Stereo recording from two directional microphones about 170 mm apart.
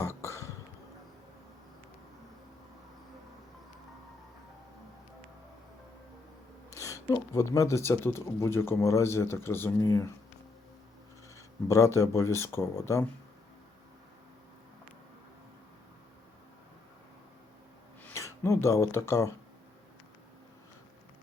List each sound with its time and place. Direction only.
0.0 s a sound: 15° left (ahead or behind)
7.1 s speech: 20° left (ahead or behind)
11.7 s speech: 20° left (ahead or behind)
18.0 s speech: 15° left (ahead or behind)